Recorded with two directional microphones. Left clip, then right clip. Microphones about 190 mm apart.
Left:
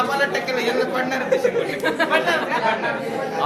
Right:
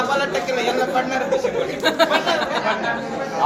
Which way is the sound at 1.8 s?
50° right (ahead or behind).